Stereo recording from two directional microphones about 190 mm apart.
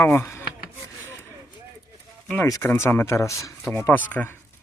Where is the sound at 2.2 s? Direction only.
15° left (ahead or behind).